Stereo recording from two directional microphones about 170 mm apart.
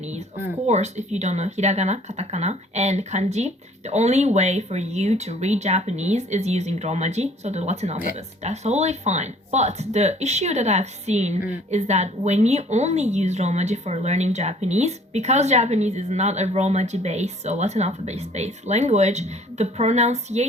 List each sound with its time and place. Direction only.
0.6 s speech: 40° right (ahead or behind)